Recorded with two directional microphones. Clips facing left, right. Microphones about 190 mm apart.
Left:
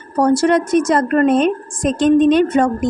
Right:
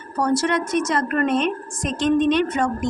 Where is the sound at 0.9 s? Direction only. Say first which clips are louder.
Left 8 dB; 40° left (ahead or behind).